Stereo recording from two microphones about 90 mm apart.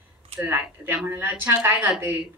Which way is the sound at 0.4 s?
20° right (ahead or behind).